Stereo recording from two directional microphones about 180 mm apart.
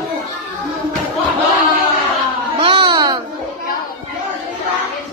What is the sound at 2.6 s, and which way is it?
Baby cry, 30° right (ahead or behind).